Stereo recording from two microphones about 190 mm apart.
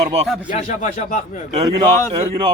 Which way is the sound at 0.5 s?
40° left (ahead or behind).